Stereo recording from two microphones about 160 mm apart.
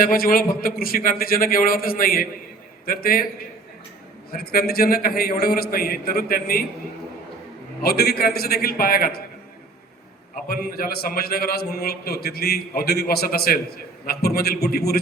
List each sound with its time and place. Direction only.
0.0 s a man's voice: 65° left (ahead or behind)
4.3 s a man's voice: 70° left (ahead or behind)
7.8 s a man's voice: 75° left (ahead or behind)
10.5 s a man's voice: 70° left (ahead or behind)